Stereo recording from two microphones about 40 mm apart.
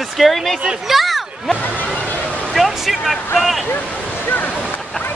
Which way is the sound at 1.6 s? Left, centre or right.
Left.